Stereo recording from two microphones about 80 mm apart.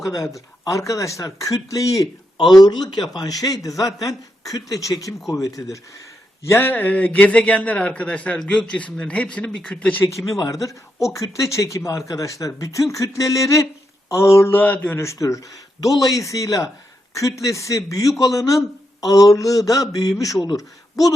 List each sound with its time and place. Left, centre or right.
0.0 s speech: left
2.6 s a man's voice: left
6.4 s a man's voice: left; by 10.0 s centre
10.1 s a man's voice: left